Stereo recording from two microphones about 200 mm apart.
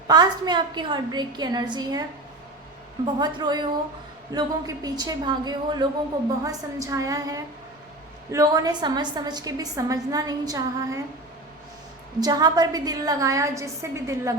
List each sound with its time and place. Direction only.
0.1 s a woman's voice: 20° right (ahead or behind)
3.2 s a woman's voice: 20° right (ahead or behind)
12.2 s a woman's voice: 20° right (ahead or behind)